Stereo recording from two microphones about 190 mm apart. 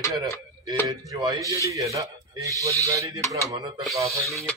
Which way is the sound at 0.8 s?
20° right (ahead or behind).